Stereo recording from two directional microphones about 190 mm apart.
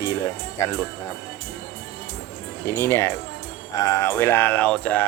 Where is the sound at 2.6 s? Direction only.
15° left (ahead or behind).